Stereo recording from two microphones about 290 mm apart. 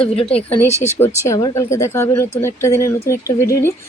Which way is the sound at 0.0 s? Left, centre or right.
Centre.